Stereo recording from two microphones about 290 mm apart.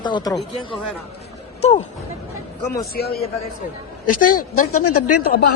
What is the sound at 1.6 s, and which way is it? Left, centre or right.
Speech, left.